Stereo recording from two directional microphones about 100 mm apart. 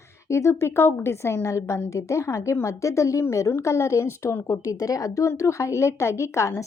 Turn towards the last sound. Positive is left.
turn(degrees=30)  # may be behind; listen again after turning